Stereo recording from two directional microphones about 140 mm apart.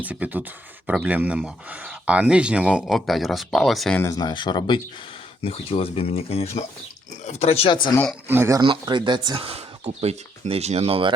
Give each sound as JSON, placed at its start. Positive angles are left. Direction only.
{"t": 0.0, "sound": "speech", "side_deg": -10}
{"t": 3.9, "sound": "speech", "side_deg": 20}
{"t": 5.4, "sound": "speech", "side_deg": 45}
{"t": 8.3, "sound": "speech", "side_deg": -20}
{"t": 8.6, "sound": "speech", "side_deg": -35}